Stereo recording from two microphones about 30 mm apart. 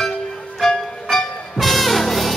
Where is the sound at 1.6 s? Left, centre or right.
Centre.